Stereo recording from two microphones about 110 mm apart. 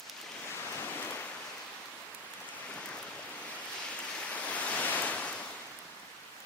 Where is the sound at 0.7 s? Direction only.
20° left (ahead or behind).